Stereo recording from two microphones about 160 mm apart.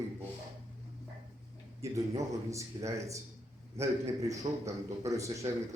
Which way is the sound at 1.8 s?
20° right (ahead or behind).